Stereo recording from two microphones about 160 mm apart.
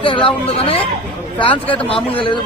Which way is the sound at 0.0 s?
35° left (ahead or behind).